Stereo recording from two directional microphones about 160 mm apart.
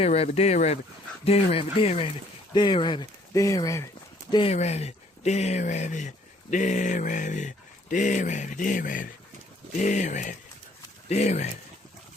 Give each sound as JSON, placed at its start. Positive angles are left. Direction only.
{"t": 0.0, "sound": "speech", "side_deg": 40}
{"t": 4.5, "sound": "speech", "side_deg": 45}